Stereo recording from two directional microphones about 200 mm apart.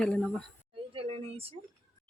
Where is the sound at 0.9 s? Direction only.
25° right (ahead or behind).